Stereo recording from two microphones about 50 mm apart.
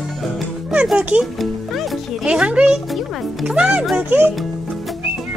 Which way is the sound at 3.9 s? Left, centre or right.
Right.